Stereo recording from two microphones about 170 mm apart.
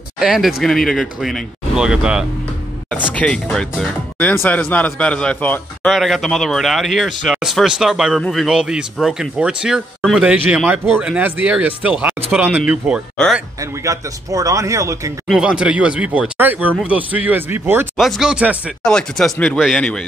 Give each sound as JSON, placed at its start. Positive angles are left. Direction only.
{"t": 0.2, "sound": "speech", "side_deg": -5}
{"t": 2.9, "sound": "speech", "side_deg": 10}
{"t": 13.6, "sound": "speech", "side_deg": -20}
{"t": 15.2, "sound": "speech", "side_deg": -5}
{"t": 17.9, "sound": "speech", "side_deg": 0}